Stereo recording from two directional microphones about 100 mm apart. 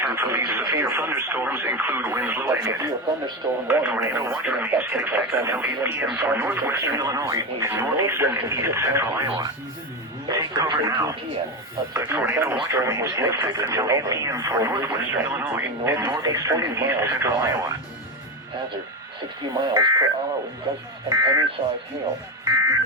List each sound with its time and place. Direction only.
0.0 s speech: 20° right (ahead or behind)
10.2 s speech: 35° right (ahead or behind)
14.9 s speech: 25° right (ahead or behind)
16.8 s speech: 25° right (ahead or behind)
19.5 s speech: 45° right (ahead or behind)
21.1 s speech: 40° right (ahead or behind)
22.4 s speech: 35° right (ahead or behind)